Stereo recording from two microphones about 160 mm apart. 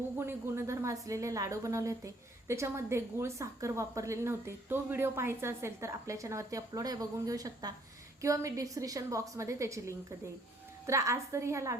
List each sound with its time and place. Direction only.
0.2 s a woman's voice: 15° right (ahead or behind)